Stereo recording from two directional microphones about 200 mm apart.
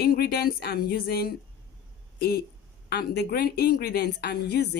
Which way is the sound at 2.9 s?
55° left (ahead or behind).